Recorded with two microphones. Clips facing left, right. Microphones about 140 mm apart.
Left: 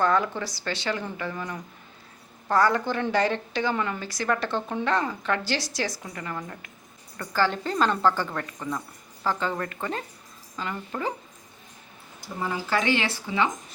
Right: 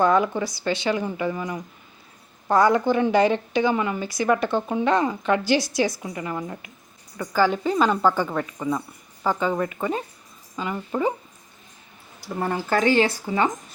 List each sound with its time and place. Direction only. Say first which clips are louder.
0.0 s a woman's voice: right 4 dB; 15° right (ahead or behind)
12.4 s speech: right 5 dB; 50° right (ahead or behind)